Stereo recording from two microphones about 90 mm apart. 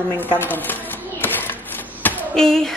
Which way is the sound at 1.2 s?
25° left (ahead or behind).